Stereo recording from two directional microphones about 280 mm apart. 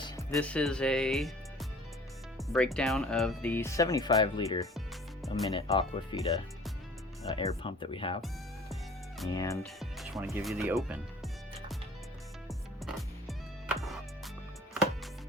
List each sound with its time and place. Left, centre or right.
0.0 s speech: centre
8.7 s music: centre
9.3 s speech: centre
9.8 s speech: centre
12.5 s music: centre